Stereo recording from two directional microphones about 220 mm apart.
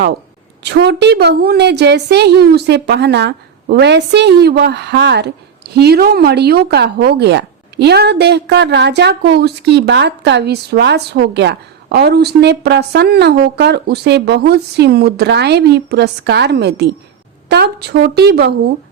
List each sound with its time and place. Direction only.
0.6 s a woman's voice: 50° right (ahead or behind)